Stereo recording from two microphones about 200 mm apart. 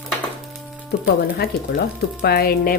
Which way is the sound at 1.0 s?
50° left (ahead or behind).